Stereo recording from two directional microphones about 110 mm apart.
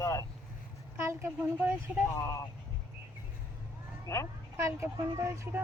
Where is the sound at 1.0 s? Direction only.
20° right (ahead or behind).